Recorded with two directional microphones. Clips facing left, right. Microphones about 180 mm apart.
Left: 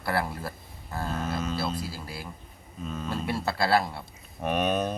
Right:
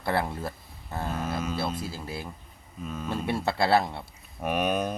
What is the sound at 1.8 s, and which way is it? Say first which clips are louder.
Speech: right 2 dB; 25° right (ahead or behind).